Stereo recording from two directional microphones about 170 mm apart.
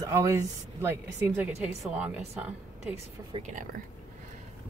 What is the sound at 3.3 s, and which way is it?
Speech, 30° right (ahead or behind).